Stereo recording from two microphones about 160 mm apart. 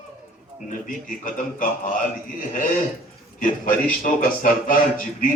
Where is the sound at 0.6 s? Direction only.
55° left (ahead or behind).